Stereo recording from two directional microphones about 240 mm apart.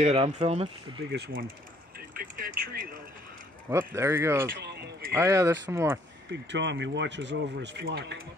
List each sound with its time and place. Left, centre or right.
0.0 s speech: right
1.1 s speech: right
2.0 s vehicle: right
3.7 s speech: centre
4.5 s a sound: right
5.1 s speech: centre
6.3 s speech: right